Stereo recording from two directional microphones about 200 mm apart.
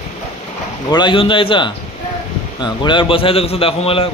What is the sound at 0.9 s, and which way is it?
A man's voice, 25° left (ahead or behind).